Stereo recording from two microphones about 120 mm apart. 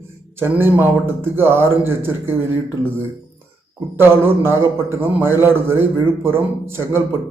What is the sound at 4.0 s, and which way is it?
Speech, 20° right (ahead or behind).